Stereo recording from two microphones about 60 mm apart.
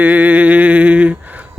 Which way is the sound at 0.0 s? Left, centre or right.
Right.